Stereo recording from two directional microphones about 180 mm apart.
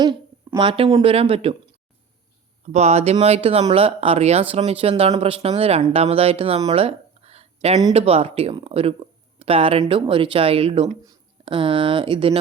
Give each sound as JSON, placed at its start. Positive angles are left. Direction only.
{"t": 0.0, "sound": "speech", "side_deg": -25}
{"t": 2.6, "sound": "speech", "side_deg": -40}
{"t": 6.7, "sound": "a sound", "side_deg": -35}
{"t": 7.9, "sound": "speech", "side_deg": -35}